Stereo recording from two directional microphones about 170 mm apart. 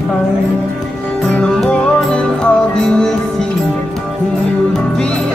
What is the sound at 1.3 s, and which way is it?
Music, 5° left (ahead or behind).